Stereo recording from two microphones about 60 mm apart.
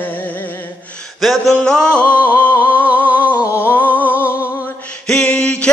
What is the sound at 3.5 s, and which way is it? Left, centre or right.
Humming, left.